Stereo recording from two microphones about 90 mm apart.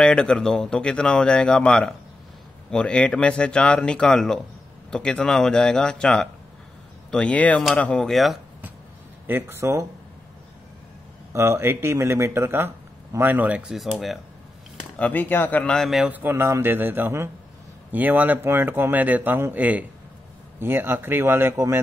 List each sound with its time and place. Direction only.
0.0 s speech: 10° left (ahead or behind)
8.1 s speech: centre (ahead or behind)
9.3 s speech: 30° right (ahead or behind)
11.3 s speech: 35° right (ahead or behind); by 13.7 s 15° right (ahead or behind)
15.0 s speech: 20° left (ahead or behind)
15.7 s speech: 5° left (ahead or behind)
16.0 s speech: 20° right (ahead or behind)